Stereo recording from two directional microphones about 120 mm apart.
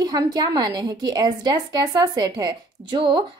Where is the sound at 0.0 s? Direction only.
35° right (ahead or behind).